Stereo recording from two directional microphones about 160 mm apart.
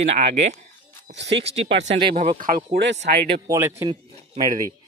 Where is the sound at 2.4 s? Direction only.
50° right (ahead or behind).